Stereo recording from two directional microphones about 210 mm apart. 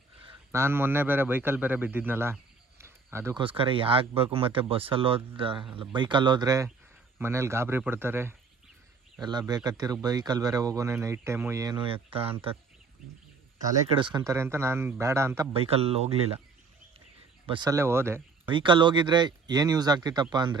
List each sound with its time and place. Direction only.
0.5 s a man's voice: 10° right (ahead or behind)
3.4 s speech: 25° right (ahead or behind)
9.6 s speech: 15° right (ahead or behind)
13.9 s speech: 20° right (ahead or behind)
15.5 s speech: 30° right (ahead or behind)
17.4 s speech: 20° right (ahead or behind)
18.5 s speech: 25° right (ahead or behind)